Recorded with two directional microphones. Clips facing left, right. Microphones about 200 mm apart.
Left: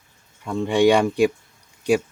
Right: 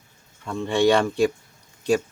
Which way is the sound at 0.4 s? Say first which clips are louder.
Left 3 dB; 15° left (ahead or behind).